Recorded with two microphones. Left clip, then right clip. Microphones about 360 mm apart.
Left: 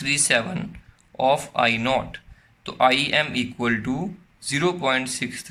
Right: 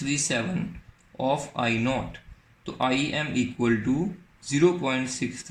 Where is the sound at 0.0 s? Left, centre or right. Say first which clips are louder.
Left 6 dB; left.